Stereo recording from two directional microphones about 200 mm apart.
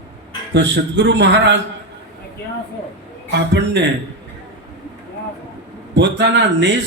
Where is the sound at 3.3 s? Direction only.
60° right (ahead or behind).